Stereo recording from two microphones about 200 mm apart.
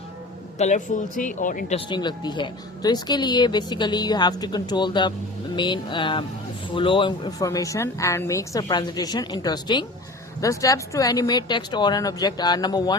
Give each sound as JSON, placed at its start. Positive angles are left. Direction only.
{"t": 0.6, "sound": "a woman's voice", "side_deg": 40}
{"t": 1.9, "sound": "speech", "side_deg": 20}